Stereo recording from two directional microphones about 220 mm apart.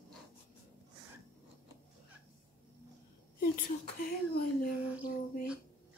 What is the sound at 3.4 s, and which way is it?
Speech, 40° left (ahead or behind).